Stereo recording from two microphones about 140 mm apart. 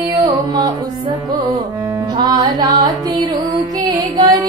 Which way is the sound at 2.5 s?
30° right (ahead or behind).